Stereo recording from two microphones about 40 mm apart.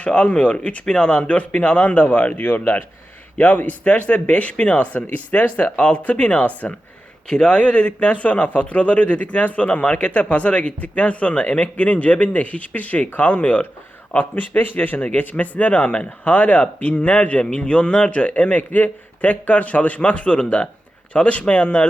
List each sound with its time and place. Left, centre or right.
0.0 s a man's voice: left
7.3 s a man's voice: left
14.3 s a man's voice: left